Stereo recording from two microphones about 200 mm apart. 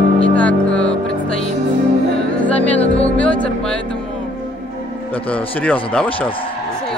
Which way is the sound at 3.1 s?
5° left (ahead or behind).